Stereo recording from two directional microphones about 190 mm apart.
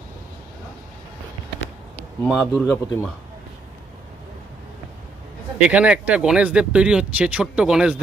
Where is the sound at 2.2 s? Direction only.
5° left (ahead or behind).